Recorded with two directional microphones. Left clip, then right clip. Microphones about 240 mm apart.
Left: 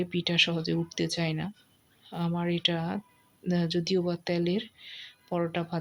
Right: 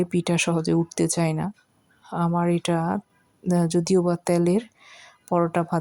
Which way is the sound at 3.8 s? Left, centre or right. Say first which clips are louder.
Right 7 dB; right.